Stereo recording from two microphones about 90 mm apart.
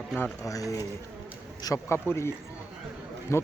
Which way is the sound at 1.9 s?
30° left (ahead or behind).